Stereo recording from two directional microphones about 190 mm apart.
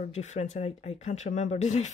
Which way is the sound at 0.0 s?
35° left (ahead or behind).